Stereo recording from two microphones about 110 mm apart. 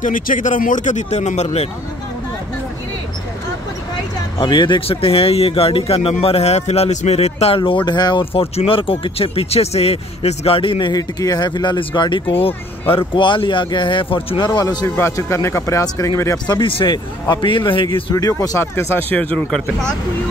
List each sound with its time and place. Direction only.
0.8 s speech: 90° left
4.4 s speech: 45° left (ahead or behind)
8.3 s speech: 60° left (ahead or behind)
10.9 s speech: 35° left (ahead or behind)
15.0 s speech: 25° left (ahead or behind)
16.4 s speech: 50° left (ahead or behind)
18.1 s speech: 35° left (ahead or behind)
18.6 s speech: 20° left (ahead or behind)